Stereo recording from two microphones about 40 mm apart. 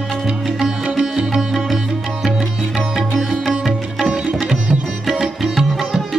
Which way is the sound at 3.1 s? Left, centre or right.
Centre.